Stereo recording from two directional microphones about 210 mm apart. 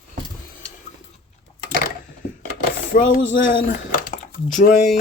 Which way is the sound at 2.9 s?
40° left (ahead or behind).